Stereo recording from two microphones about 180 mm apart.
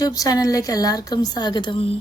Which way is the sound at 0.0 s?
20° left (ahead or behind).